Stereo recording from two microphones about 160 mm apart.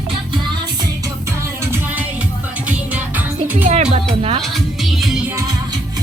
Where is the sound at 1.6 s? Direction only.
15° right (ahead or behind).